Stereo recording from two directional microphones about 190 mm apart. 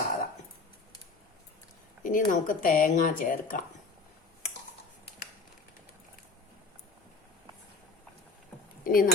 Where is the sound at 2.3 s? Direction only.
45° left (ahead or behind).